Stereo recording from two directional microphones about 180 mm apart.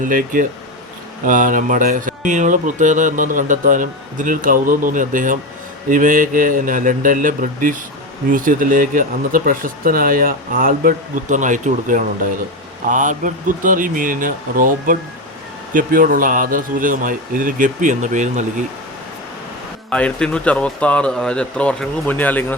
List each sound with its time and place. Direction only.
0.0 s speech: 50° right (ahead or behind)
19.9 s speech: 5° left (ahead or behind)